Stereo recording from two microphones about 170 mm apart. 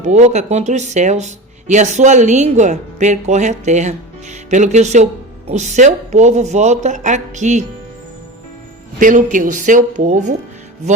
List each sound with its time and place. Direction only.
0.0 s speech: 45° right (ahead or behind)
9.0 s speech: 50° right (ahead or behind)